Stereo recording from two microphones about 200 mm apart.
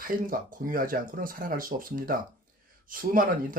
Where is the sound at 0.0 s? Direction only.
45° right (ahead or behind).